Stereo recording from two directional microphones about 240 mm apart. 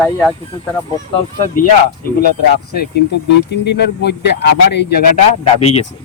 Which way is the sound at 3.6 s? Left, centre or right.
Left.